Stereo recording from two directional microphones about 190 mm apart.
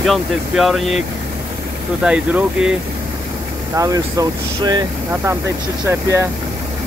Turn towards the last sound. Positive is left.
turn(degrees=-15)  # may be behind; listen again after turning